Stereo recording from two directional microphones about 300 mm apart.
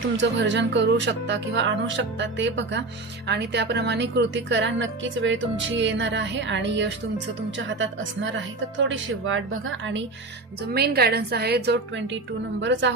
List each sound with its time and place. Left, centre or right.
0.2 s a woman's voice: right